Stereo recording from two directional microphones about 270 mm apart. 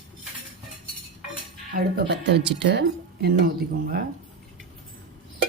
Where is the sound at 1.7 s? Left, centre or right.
Right.